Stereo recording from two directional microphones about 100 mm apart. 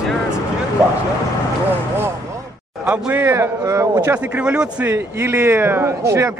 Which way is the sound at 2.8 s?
15° right (ahead or behind).